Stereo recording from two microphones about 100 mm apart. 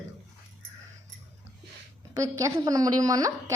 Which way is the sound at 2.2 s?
35° right (ahead or behind).